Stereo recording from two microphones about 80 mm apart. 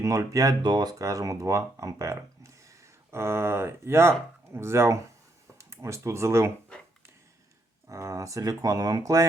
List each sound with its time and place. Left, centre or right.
0.0 s speech: right
0.6 s speech: right
7.9 s speech: right